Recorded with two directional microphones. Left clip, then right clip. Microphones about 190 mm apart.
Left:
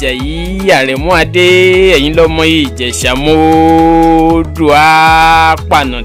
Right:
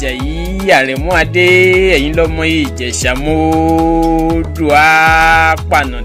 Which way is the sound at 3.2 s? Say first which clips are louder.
Left 7 dB; 35° left (ahead or behind).